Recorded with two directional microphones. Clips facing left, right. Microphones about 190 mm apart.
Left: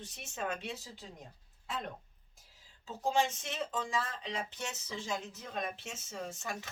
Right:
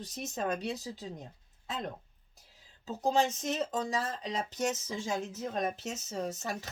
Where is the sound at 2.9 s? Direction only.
40° right (ahead or behind).